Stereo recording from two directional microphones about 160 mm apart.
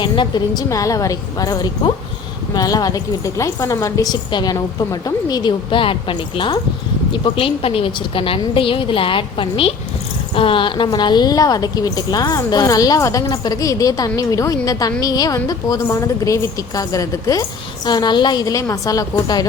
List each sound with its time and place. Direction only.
0.0 s a woman's voice: 30° left (ahead or behind)